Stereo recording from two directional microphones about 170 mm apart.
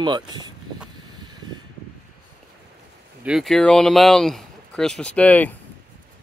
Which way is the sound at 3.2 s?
Centre (ahead or behind).